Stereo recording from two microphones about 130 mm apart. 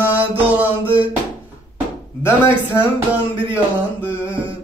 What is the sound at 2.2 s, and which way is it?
Speech, 20° left (ahead or behind).